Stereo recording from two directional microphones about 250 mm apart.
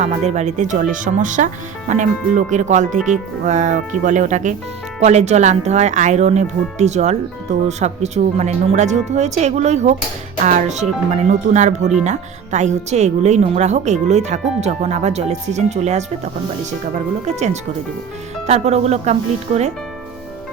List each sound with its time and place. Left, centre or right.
0.0 s speech: right